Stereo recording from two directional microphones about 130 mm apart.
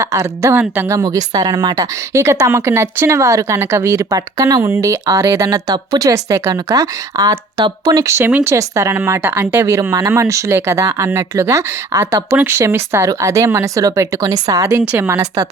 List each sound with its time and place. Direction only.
0.0 s a woman's voice: 25° right (ahead or behind)